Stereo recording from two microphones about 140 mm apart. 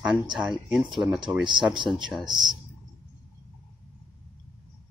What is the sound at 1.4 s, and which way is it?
Speech, 35° right (ahead or behind).